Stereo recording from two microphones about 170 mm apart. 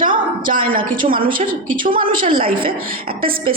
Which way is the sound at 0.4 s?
55° right (ahead or behind).